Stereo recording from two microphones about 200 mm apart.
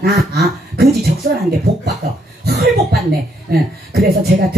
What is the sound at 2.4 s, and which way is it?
Cough, 50° right (ahead or behind).